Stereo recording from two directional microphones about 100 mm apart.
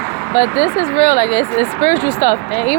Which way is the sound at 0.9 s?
90° left.